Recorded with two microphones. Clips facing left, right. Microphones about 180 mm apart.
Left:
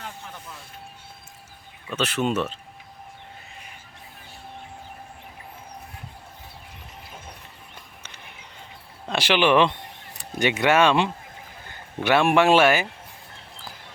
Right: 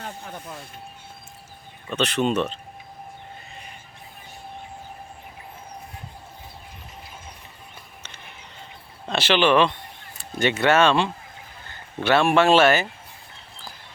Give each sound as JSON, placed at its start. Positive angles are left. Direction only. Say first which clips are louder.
{"t": 0.0, "sound": "music", "louder": "right 3 dB", "side_deg": -40}
{"t": 1.9, "sound": "speech", "louder": "right 2 dB", "side_deg": 5}
{"t": 9.0, "sound": "a man's voice", "louder": "right 1 dB", "side_deg": 10}